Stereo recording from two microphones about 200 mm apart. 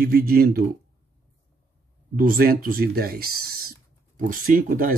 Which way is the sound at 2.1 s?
45° right (ahead or behind).